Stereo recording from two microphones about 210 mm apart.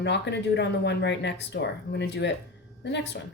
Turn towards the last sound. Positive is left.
turn(degrees=55)  # may be behind; listen again after turning